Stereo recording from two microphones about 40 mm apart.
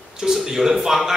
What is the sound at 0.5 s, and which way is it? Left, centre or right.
Speech, centre.